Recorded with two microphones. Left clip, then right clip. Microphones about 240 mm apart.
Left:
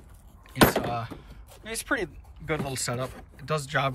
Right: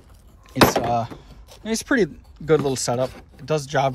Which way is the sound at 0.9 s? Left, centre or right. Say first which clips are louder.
Right 10 dB; centre.